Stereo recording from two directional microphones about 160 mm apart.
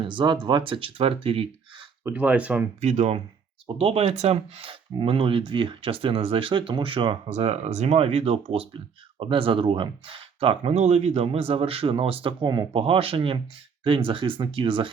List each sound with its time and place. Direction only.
0.0 s speech: 30° right (ahead or behind)
2.0 s speech: 10° right (ahead or behind)
2.8 s speech: 45° right (ahead or behind)